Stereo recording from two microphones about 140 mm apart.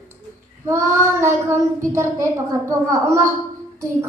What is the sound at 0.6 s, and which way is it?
Speech, 20° right (ahead or behind).